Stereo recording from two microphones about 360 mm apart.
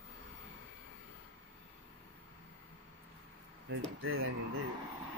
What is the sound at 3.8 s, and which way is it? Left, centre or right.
Speech, right.